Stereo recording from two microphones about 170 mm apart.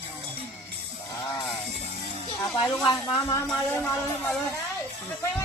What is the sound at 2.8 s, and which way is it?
Speech, 25° left (ahead or behind).